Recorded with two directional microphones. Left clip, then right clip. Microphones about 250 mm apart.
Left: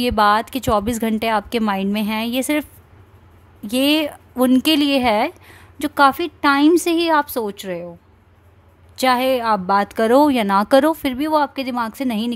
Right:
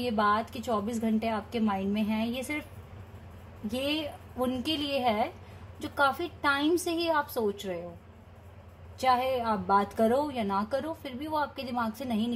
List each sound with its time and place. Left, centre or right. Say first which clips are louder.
0.1 s a woman's voice: left 11 dB; left
3.8 s a woman's voice: left 15 dB; left
8.9 s a woman's voice: left 9 dB; left